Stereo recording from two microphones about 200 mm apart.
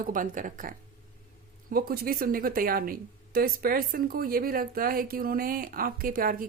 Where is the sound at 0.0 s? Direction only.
40° right (ahead or behind).